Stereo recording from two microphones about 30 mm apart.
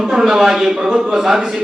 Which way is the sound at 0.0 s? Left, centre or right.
Centre.